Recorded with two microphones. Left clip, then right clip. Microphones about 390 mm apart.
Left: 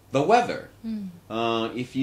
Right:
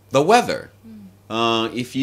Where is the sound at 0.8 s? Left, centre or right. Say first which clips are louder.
Left 9 dB; left.